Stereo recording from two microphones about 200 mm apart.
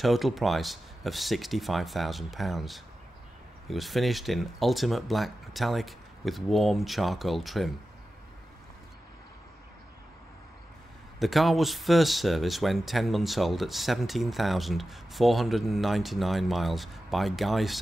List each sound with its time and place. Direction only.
0.0 s speech: centre (ahead or behind)
11.1 s speech: centre (ahead or behind)